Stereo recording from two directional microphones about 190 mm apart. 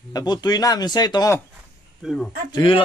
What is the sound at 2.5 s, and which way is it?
Speech, 25° left (ahead or behind).